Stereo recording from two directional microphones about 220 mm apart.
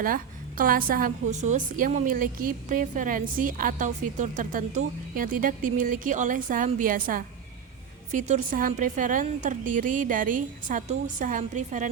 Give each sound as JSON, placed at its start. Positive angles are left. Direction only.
{"t": 0.0, "sound": "a woman's voice", "side_deg": -40}